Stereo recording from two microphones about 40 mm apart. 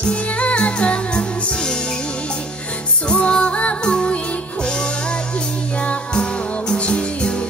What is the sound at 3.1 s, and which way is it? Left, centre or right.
Music, left.